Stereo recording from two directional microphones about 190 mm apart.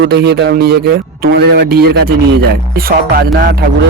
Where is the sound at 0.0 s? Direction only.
60° right (ahead or behind).